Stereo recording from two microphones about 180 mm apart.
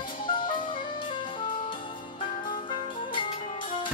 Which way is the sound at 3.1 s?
25° left (ahead or behind).